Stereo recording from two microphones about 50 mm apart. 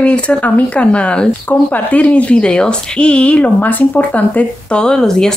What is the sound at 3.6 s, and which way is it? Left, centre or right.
Speech, left.